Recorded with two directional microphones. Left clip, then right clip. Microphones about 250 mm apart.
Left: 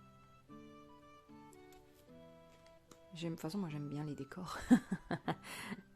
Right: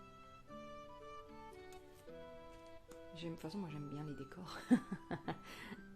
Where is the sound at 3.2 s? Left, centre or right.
Left.